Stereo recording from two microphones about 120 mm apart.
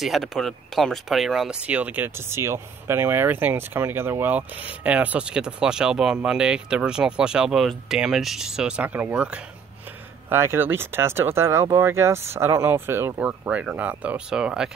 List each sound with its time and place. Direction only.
0.0 s speech: centre (ahead or behind)